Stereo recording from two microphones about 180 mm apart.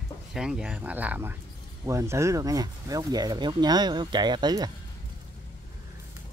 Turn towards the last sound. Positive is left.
turn(degrees=-20)  # may be behind; listen again after turning